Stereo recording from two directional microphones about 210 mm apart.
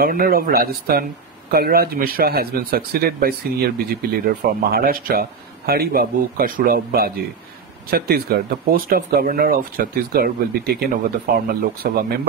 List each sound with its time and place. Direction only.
0.0 s speech: 45° right (ahead or behind)